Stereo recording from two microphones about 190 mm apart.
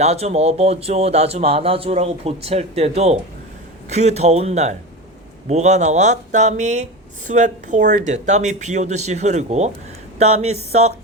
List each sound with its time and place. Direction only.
0.0 s speech: 35° right (ahead or behind)